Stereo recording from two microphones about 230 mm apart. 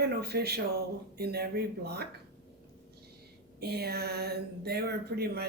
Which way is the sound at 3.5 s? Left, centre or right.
Right.